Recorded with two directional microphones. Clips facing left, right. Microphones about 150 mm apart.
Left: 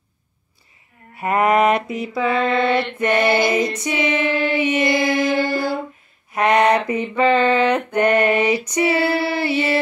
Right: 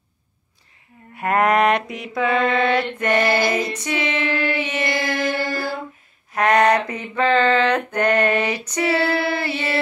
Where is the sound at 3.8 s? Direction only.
10° left (ahead or behind).